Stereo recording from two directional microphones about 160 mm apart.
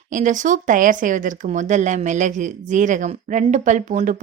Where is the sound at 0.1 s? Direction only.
50° right (ahead or behind).